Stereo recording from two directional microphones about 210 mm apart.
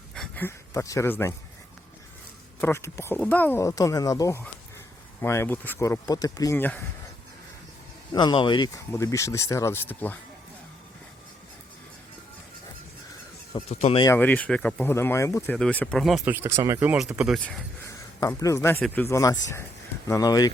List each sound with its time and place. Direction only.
0.1 s speech: 5° left (ahead or behind)
2.6 s speech: 10° left (ahead or behind)
8.1 s speech: 20° left (ahead or behind)
13.5 s speech: 20° left (ahead or behind)
14.1 s speech: 10° left (ahead or behind)
17.8 s speech: 15° left (ahead or behind)